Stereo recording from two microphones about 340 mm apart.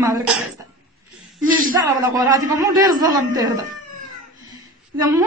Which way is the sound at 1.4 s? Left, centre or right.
Right.